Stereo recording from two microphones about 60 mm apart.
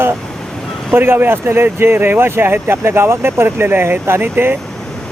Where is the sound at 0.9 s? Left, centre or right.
Right.